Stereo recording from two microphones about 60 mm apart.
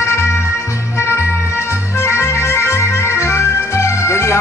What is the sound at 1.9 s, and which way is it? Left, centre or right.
Music, left.